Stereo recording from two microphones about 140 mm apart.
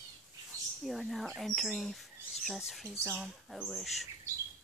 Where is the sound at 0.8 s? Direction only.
Centre (ahead or behind).